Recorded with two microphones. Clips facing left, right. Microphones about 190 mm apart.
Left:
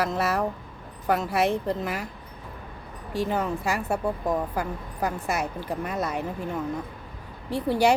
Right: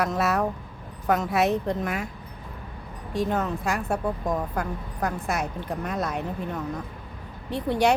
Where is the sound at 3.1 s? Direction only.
5° left (ahead or behind).